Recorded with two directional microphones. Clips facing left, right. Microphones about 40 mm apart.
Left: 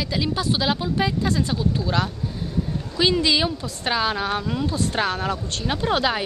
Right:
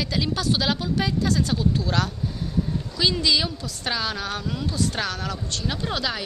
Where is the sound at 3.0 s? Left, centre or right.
Left.